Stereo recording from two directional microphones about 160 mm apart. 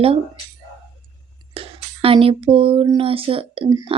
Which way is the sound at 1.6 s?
35° right (ahead or behind).